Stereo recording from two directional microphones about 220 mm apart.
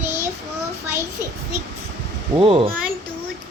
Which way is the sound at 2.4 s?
25° right (ahead or behind).